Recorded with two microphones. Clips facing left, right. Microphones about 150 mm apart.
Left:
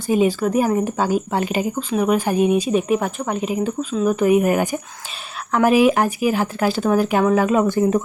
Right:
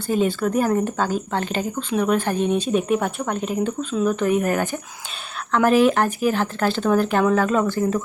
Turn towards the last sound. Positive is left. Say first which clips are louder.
# left 4 dB
turn(degrees=20)  # may be behind; listen again after turning